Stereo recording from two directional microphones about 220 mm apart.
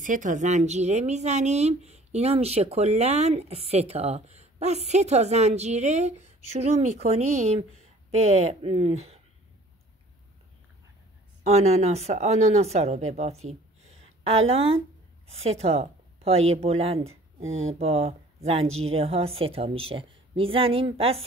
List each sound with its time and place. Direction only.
0.0 s speech: 35° right (ahead or behind)
11.4 s a woman's voice: 30° right (ahead or behind)
17.4 s speech: 65° right (ahead or behind)
17.7 s speech: 25° right (ahead or behind)